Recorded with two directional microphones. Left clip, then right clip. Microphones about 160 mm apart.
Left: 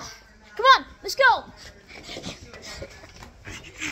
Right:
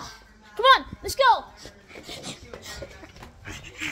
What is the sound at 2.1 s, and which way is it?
Filing, 25° right (ahead or behind).